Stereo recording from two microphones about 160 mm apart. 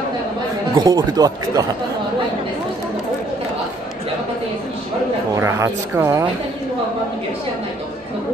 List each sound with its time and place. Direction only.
0.7 s speech: 25° right (ahead or behind)
5.3 s speech: 15° right (ahead or behind)